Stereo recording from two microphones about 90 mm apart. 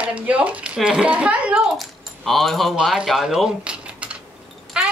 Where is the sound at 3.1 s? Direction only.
5° right (ahead or behind).